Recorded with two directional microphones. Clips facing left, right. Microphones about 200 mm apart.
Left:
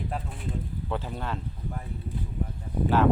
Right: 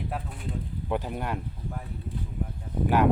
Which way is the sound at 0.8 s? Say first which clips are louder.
Right 4 dB; 15° right (ahead or behind).